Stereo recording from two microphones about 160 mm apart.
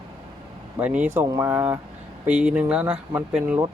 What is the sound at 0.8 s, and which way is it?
Speech, 10° right (ahead or behind).